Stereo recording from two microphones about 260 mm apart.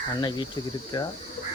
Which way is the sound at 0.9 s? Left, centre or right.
Centre.